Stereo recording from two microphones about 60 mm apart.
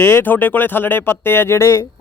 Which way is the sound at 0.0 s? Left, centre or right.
Left.